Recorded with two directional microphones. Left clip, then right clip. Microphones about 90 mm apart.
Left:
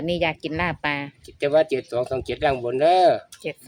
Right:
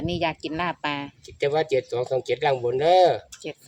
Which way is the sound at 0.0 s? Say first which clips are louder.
Left 3 dB; 35° left (ahead or behind).